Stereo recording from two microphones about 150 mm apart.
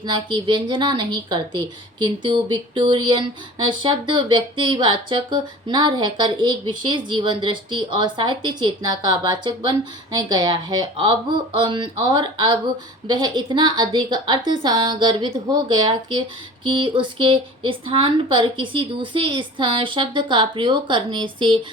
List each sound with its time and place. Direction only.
0.0 s a woman's voice: 30° right (ahead or behind)